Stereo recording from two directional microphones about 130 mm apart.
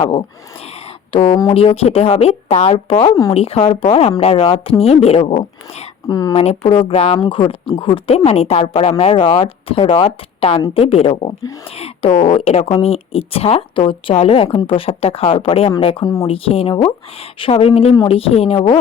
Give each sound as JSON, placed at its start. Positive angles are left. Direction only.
{"t": 0.0, "sound": "speech", "side_deg": 40}
{"t": 6.1, "sound": "speech", "side_deg": 30}
{"t": 6.3, "sound": "speech", "side_deg": 50}